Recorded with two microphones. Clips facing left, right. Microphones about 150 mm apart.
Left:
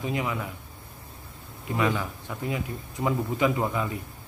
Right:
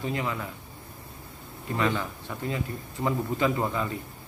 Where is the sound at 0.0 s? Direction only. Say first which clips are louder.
Left 1 dB; 15° left (ahead or behind).